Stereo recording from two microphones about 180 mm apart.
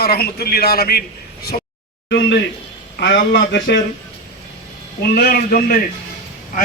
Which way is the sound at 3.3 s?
65° left (ahead or behind).